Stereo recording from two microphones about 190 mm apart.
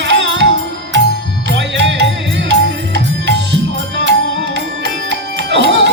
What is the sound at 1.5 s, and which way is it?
Music, 70° right (ahead or behind).